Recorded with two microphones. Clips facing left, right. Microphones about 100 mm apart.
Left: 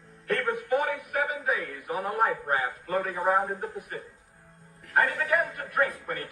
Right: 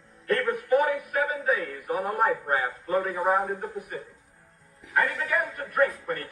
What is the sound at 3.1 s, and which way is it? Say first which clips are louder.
Speech: right 1 dB; 5° right (ahead or behind).